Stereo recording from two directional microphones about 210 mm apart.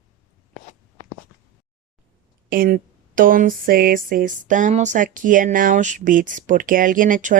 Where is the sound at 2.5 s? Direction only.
45° right (ahead or behind).